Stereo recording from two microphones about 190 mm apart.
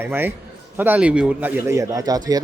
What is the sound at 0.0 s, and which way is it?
Speech, 10° right (ahead or behind).